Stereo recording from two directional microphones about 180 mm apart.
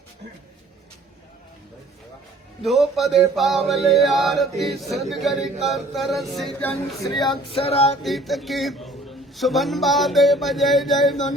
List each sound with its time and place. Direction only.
2.6 s male singing: centre (ahead or behind)
7.5 s music: 35° left (ahead or behind)
8.0 s male singing: centre (ahead or behind)